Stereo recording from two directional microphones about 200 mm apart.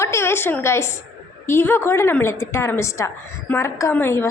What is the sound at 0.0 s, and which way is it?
A woman's voice, 15° left (ahead or behind).